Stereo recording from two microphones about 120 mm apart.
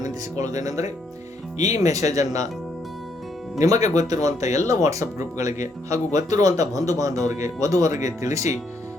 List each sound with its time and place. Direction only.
0.0 s a man's voice: 30° right (ahead or behind)
3.6 s a man's voice: 30° right (ahead or behind)